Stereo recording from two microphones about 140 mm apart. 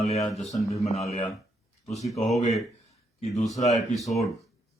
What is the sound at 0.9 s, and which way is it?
Speech, 50° left (ahead or behind).